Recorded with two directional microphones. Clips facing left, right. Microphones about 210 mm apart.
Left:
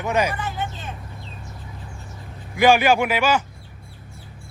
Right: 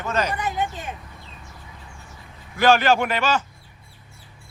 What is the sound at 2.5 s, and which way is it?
Speech, 10° left (ahead or behind).